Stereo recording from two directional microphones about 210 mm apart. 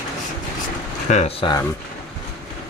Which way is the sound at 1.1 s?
35° left (ahead or behind).